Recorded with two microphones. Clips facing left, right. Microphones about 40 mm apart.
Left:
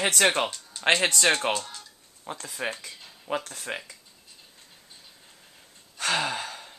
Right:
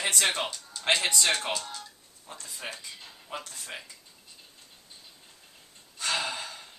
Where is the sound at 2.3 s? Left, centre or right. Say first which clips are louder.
Left 8 dB; left.